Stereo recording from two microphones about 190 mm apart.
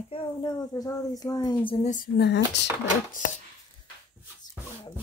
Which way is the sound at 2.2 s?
65° left (ahead or behind).